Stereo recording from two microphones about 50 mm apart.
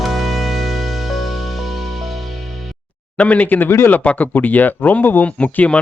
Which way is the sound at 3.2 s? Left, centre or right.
Left.